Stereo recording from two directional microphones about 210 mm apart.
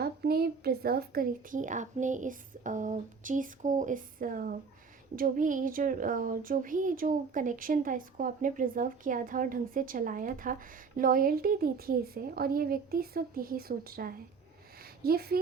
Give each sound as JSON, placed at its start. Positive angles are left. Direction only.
{"t": 0.0, "sound": "a child's voice", "side_deg": -45}